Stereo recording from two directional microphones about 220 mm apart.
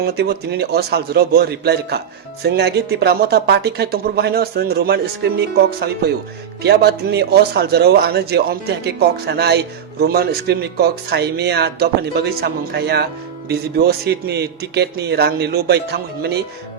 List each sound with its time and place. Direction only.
0.0 s speech: 45° right (ahead or behind)